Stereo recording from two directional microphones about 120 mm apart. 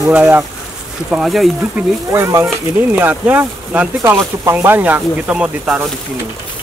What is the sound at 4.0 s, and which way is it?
Speech, 25° right (ahead or behind).